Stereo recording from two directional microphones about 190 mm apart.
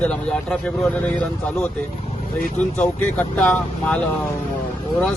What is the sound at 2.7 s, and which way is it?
Speech, 10° left (ahead or behind).